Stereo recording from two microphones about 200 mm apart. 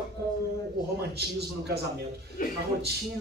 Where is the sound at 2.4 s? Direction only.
45° left (ahead or behind).